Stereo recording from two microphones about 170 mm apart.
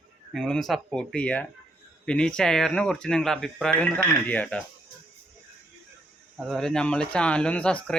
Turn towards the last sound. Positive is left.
turn(degrees=5)  # may be behind; listen again after turning